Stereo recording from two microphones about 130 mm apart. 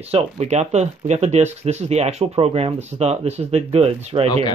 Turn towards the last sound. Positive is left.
turn(degrees=-50)  # may be behind; listen again after turning